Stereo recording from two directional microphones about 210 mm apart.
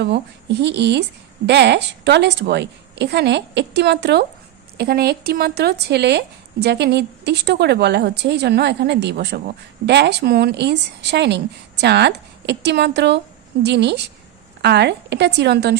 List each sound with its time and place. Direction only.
0.0 s speech: 55° right (ahead or behind)